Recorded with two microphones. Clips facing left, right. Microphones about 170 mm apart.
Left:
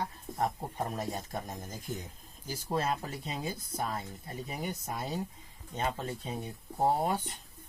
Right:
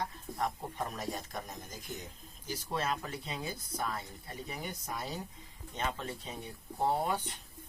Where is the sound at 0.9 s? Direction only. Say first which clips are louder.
Left 3 dB; 30° left (ahead or behind).